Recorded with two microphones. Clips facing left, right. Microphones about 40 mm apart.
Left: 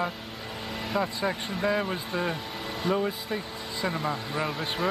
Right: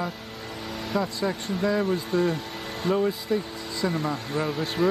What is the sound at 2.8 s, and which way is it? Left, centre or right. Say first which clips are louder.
Speech: right 3 dB; centre.